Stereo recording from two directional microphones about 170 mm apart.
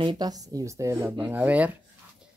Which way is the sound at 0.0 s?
25° right (ahead or behind).